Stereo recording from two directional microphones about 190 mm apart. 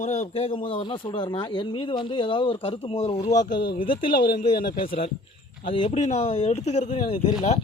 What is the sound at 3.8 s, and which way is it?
Speech, 45° left (ahead or behind).